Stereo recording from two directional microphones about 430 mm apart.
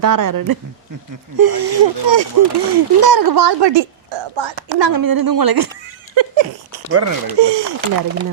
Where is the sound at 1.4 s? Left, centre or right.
Right.